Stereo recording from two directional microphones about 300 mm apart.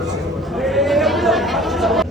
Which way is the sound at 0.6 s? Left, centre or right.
Centre.